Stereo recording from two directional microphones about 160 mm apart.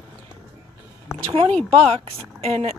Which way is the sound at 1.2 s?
35° right (ahead or behind).